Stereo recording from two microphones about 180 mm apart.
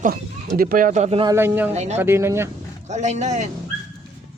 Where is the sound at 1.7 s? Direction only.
40° right (ahead or behind).